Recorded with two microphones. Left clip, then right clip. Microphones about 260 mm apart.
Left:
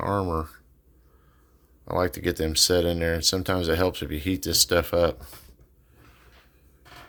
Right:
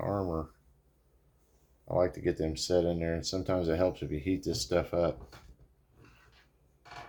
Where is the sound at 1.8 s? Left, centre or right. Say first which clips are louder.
Left 4 dB; left.